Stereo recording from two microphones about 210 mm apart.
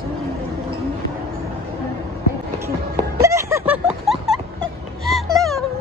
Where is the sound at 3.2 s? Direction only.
15° right (ahead or behind).